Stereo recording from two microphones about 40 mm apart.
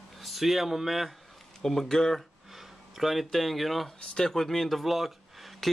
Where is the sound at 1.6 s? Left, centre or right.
Centre.